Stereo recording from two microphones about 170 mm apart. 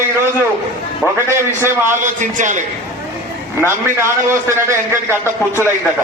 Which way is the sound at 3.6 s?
15° right (ahead or behind).